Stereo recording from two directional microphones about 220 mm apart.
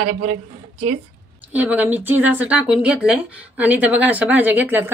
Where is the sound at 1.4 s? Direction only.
5° right (ahead or behind).